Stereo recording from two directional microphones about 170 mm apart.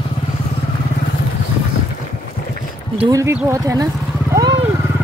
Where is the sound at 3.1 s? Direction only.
15° right (ahead or behind).